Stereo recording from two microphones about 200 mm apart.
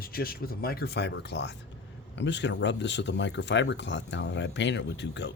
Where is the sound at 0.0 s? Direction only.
50° left (ahead or behind).